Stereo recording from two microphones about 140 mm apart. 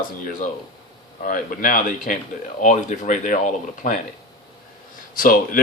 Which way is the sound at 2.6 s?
60° left (ahead or behind).